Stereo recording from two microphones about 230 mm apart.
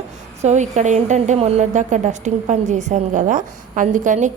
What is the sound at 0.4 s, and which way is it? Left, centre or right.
A woman's voice, right.